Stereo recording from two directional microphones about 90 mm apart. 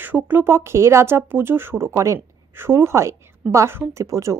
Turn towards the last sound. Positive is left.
turn(degrees=-35)  # may be behind; listen again after turning